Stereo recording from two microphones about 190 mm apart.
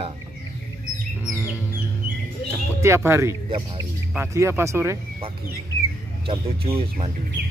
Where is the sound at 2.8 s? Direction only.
15° right (ahead or behind).